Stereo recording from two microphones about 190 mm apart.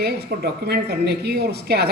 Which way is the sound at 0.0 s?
60° right (ahead or behind).